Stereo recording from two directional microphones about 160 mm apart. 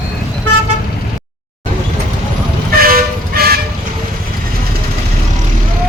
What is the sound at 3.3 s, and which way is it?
Vehicle, 70° right (ahead or behind).